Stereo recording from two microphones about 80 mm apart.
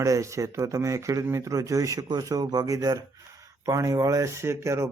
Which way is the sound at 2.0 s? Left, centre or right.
Right.